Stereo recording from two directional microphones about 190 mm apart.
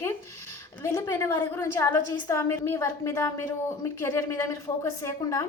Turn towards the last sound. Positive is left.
turn(degrees=15)  # may be behind; listen again after turning